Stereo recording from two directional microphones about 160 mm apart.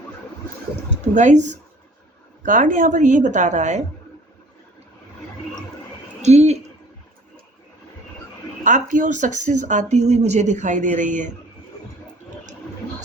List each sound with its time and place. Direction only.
1.1 s speech: 50° right (ahead or behind)
6.2 s speech: 45° right (ahead or behind)
8.6 s speech: 50° right (ahead or behind)